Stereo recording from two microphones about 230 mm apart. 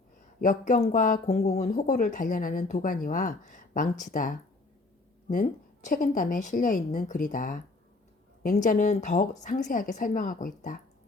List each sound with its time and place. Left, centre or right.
0.4 s speech: left